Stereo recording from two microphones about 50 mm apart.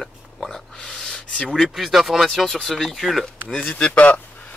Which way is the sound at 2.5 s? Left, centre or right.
Centre.